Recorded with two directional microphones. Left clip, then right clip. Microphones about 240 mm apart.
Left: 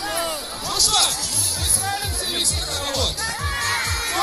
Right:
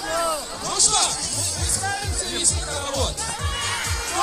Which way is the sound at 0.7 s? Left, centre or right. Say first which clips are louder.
Left 2 dB; right.